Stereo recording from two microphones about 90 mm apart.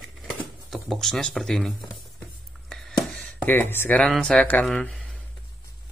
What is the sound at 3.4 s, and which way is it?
Speech, 20° left (ahead or behind).